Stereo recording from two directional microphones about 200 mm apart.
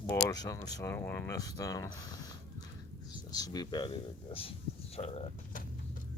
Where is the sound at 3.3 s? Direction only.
20° left (ahead or behind).